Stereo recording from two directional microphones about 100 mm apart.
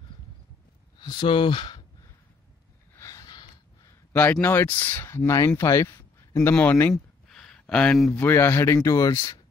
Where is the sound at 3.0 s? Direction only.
35° left (ahead or behind).